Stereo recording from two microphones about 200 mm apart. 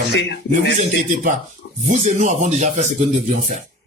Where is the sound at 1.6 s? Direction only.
75° left (ahead or behind).